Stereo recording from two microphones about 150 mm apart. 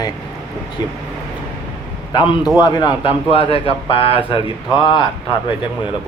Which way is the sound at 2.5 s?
25° left (ahead or behind).